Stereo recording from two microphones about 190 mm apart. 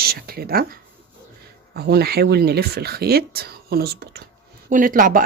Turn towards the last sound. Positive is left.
turn(degrees=-45)  # may be behind; listen again after turning